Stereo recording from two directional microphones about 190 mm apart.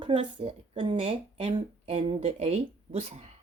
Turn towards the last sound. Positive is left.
turn(degrees=-30)  # may be behind; listen again after turning